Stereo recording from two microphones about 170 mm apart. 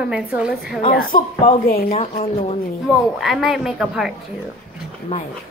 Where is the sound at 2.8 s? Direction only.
Centre (ahead or behind).